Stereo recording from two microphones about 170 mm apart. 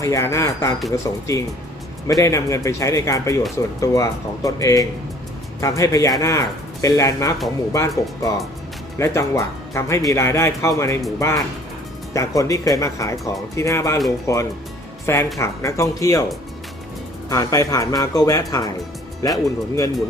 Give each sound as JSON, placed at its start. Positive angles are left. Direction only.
{"t": 0.0, "sound": "speech", "side_deg": 20}
{"t": 17.2, "sound": "speech", "side_deg": 20}